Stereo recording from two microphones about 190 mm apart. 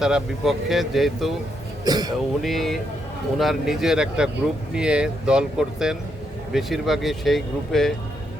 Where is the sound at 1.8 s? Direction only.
20° right (ahead or behind).